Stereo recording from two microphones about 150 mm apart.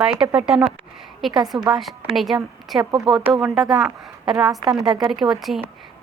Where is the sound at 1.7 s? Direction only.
Centre (ahead or behind).